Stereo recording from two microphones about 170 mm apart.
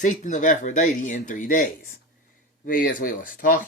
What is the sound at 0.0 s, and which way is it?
A man's voice, 45° left (ahead or behind).